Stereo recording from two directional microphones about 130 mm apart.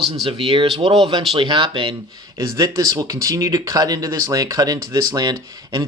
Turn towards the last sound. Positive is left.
turn(degrees=-35)  # may be behind; listen again after turning